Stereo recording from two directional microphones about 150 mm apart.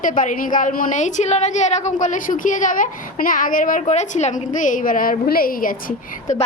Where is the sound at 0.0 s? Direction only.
60° left (ahead or behind).